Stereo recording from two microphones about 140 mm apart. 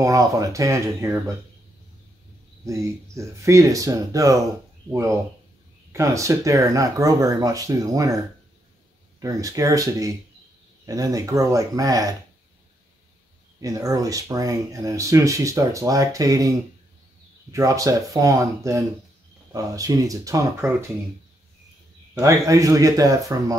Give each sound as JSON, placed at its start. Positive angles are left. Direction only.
{"t": 0.0, "sound": "speech", "side_deg": -25}
{"t": 2.6, "sound": "speech", "side_deg": -20}
{"t": 5.9, "sound": "speech", "side_deg": -20}
{"t": 13.6, "sound": "speech", "side_deg": -25}
{"t": 22.2, "sound": "speech", "side_deg": -25}